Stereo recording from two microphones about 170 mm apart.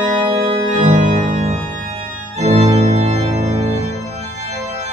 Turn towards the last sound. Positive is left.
turn(degrees=-40)  # may be behind; listen again after turning